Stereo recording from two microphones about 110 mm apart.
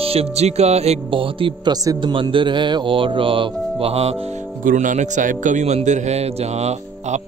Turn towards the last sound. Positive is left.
turn(degrees=-90)